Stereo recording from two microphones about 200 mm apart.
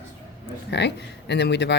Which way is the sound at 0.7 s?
60° left (ahead or behind).